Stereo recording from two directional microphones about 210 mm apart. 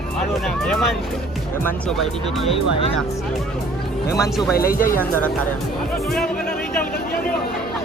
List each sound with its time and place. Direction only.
1.6 s speech: centre (ahead or behind)
4.2 s speech: centre (ahead or behind)
4.5 s speech: 45° left (ahead or behind)